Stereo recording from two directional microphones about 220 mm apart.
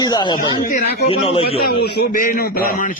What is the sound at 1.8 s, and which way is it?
A man's voice, 40° left (ahead or behind).